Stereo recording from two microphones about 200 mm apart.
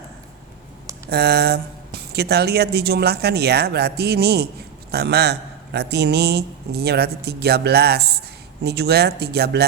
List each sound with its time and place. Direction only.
1.1 s speech: 55° right (ahead or behind)